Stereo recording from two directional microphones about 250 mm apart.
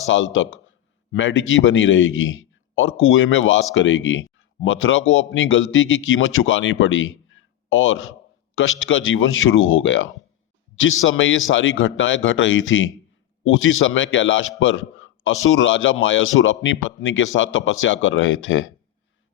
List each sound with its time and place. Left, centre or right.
0.1 s a man's voice: left